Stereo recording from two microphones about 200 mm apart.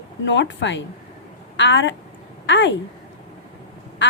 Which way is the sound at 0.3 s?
65° left (ahead or behind).